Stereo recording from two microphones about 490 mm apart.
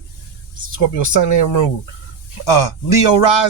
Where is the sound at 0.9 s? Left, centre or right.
Left.